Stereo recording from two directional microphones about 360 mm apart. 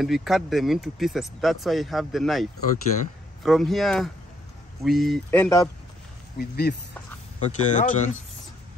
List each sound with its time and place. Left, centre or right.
0.0 s speech: centre
3.4 s speech: centre
6.3 s speech: left